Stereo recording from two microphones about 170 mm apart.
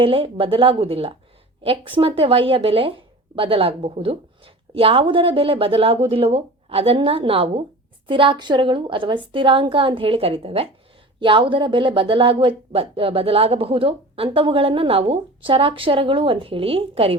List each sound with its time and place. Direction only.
0.0 s a woman's voice: 30° right (ahead or behind)